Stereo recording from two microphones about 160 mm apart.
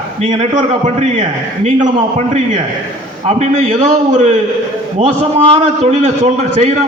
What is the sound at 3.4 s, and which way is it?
A man's voice, 50° right (ahead or behind).